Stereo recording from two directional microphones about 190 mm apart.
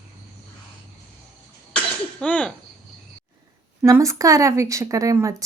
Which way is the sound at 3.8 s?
15° right (ahead or behind).